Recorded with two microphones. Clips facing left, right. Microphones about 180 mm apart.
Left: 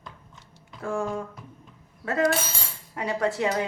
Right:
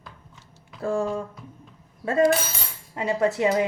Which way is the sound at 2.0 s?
25° right (ahead or behind).